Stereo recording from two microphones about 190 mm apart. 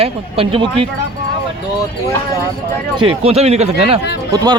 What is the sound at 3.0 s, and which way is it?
Speech, 30° right (ahead or behind).